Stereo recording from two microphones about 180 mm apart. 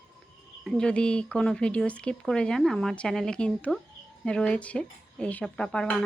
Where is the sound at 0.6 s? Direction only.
5° left (ahead or behind).